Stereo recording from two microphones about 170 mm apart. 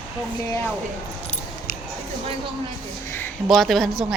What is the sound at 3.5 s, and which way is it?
Speech, centre (ahead or behind).